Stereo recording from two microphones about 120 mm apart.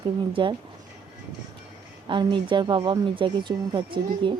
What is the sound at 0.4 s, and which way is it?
Speech, 45° right (ahead or behind).